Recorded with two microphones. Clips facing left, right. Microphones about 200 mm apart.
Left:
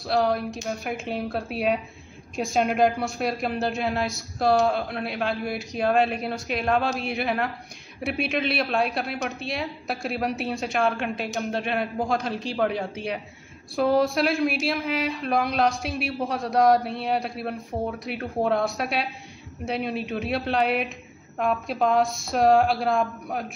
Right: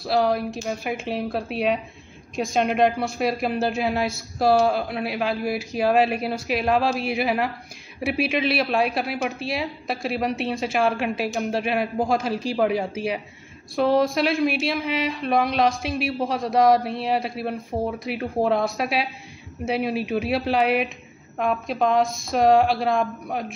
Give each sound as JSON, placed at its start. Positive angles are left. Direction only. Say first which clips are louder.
{"t": 0.0, "sound": "speech", "louder": "right 2 dB", "side_deg": 0}